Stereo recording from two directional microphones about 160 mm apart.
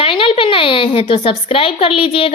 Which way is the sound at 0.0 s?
35° left (ahead or behind).